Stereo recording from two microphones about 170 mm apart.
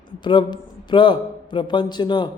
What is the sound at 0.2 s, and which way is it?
A man's voice, 25° left (ahead or behind).